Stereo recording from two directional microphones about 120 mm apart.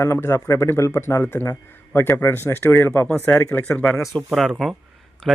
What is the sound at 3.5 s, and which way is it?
Speech, 10° left (ahead or behind).